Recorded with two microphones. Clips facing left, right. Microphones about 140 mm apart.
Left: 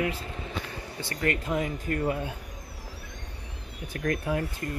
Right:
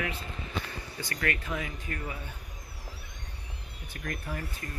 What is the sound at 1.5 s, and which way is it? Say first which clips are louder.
Speech: left 7 dB; 45° left (ahead or behind).